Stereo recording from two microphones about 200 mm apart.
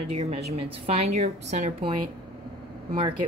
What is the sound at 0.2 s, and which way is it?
A woman's voice, 30° right (ahead or behind).